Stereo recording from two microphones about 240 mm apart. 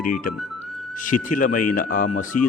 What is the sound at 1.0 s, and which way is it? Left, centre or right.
A man's voice, left.